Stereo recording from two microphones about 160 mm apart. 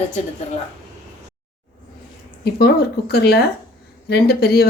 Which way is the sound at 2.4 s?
80° left.